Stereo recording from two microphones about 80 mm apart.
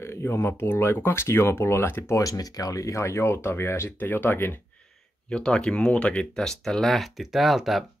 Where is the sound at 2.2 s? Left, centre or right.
Left.